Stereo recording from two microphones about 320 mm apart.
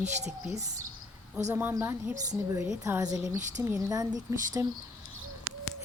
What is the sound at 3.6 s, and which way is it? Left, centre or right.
Speech, centre.